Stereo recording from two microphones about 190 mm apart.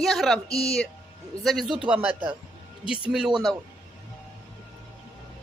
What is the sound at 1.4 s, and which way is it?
Speech, centre (ahead or behind).